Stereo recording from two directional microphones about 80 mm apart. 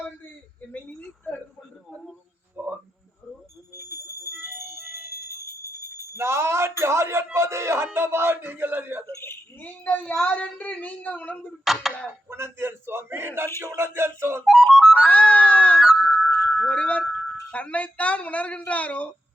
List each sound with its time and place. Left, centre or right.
0.7 s a sound: left
2.6 s a sound: right
3.8 s music: left
4.3 s music: right
6.1 s a sound: right
7.9 s speech: right
9.6 s a woman's voice: centre
11.6 s a sound: centre
12.3 s a man's voice: right
14.4 s music: centre
14.9 s a woman's voice: centre
15.8 s wind chime: centre
16.6 s a woman's voice: centre